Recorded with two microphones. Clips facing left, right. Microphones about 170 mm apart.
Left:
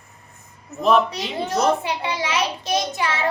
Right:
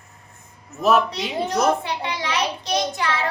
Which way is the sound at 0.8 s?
5° right (ahead or behind).